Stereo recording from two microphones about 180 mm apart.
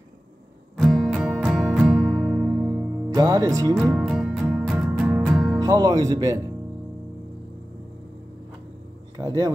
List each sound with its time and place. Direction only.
0.7 s music: centre (ahead or behind)
3.2 s speech: 20° right (ahead or behind)
3.7 s music: centre (ahead or behind)
5.6 s speech: 20° right (ahead or behind)
9.2 s speech: 20° right (ahead or behind)